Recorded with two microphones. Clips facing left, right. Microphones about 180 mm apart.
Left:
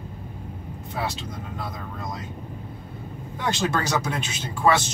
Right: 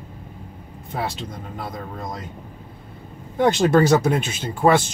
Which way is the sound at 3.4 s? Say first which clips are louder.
Right 10 dB; 55° right (ahead or behind).